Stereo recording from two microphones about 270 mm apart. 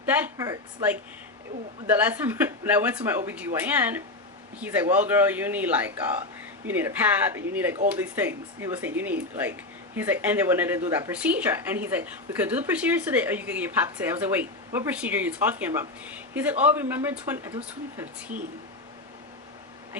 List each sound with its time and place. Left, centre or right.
0.1 s speech: centre